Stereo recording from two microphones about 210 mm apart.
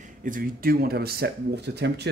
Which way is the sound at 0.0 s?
40° right (ahead or behind).